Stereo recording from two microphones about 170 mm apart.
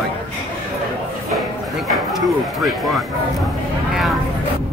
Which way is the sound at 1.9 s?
Centre (ahead or behind).